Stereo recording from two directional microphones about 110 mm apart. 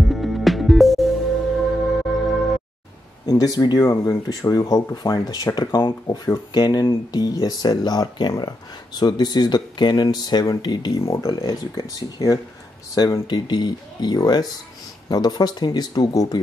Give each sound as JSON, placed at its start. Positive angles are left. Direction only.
{"t": 0.0, "sound": "music", "side_deg": 0}
{"t": 3.3, "sound": "speech", "side_deg": 35}
{"t": 3.8, "sound": "speech", "side_deg": 25}